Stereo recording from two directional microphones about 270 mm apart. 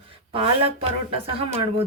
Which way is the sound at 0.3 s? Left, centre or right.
Right.